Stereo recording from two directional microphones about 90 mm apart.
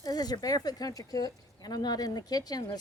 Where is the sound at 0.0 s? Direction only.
45° left (ahead or behind).